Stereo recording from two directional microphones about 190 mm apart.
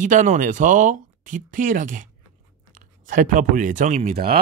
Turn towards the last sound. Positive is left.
turn(degrees=-35)  # may be behind; listen again after turning